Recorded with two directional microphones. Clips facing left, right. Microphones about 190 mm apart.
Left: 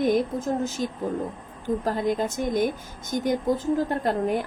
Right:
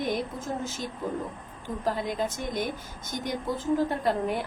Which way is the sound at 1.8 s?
45° left (ahead or behind).